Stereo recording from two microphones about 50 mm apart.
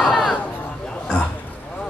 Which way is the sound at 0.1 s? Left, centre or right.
Centre.